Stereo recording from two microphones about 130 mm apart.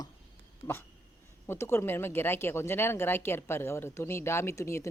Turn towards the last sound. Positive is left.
turn(degrees=20)  # may be behind; listen again after turning